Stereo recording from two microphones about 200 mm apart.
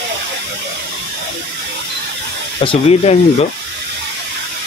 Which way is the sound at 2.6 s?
25° left (ahead or behind).